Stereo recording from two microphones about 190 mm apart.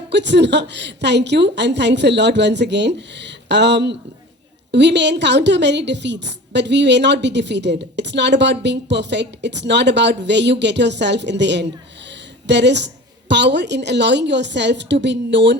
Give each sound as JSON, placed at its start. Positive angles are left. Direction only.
{"t": 0.1, "sound": "a woman's voice", "side_deg": -65}